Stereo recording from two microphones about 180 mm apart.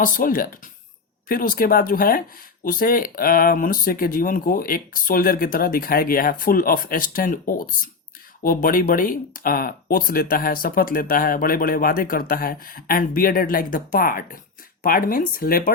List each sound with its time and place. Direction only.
0.0 s speech: 50° left (ahead or behind)